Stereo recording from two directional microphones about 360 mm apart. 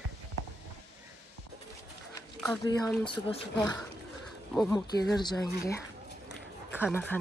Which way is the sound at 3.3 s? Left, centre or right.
Centre.